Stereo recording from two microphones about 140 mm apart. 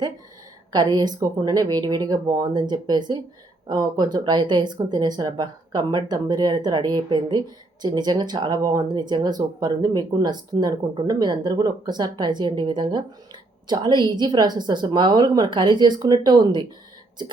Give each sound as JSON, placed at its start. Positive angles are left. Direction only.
{"t": 0.7, "sound": "speech", "side_deg": -30}